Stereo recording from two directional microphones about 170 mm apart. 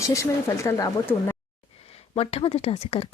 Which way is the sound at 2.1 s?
35° left (ahead or behind).